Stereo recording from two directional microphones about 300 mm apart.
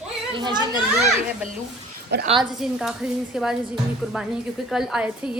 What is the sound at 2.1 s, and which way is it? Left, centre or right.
Speech, right.